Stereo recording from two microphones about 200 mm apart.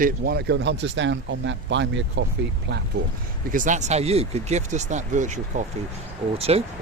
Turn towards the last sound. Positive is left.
turn(degrees=-30)  # may be behind; listen again after turning